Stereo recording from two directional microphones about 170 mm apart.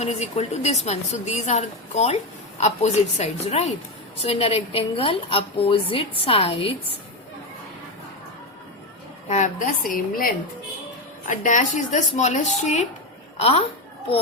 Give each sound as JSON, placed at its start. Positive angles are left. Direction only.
{"t": 0.0, "sound": "a woman's voice", "side_deg": 40}
{"t": 9.3, "sound": "a woman's voice", "side_deg": 45}